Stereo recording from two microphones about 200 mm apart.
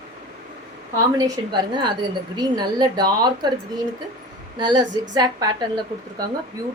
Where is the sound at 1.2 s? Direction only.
20° right (ahead or behind).